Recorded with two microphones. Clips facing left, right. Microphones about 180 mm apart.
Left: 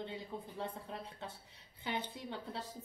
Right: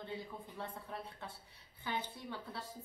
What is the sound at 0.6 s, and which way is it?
A woman's voice, 20° left (ahead or behind).